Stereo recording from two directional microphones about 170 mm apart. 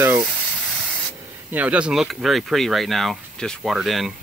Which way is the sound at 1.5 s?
10° right (ahead or behind).